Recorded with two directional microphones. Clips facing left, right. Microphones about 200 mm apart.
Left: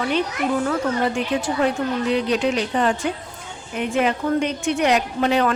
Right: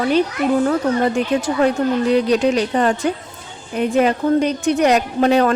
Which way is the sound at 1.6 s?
40° right (ahead or behind).